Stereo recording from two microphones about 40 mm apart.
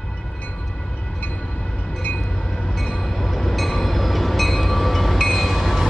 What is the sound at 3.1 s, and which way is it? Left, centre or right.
Train, centre.